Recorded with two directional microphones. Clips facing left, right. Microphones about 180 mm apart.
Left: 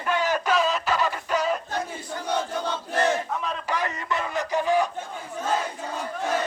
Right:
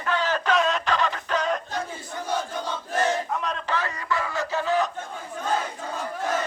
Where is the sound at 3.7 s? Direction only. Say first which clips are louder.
Even; 20° left (ahead or behind).